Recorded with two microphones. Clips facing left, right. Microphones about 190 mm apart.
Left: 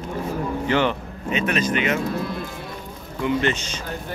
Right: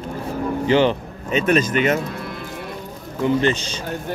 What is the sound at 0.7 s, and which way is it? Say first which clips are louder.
Speech: right 5 dB; 30° right (ahead or behind).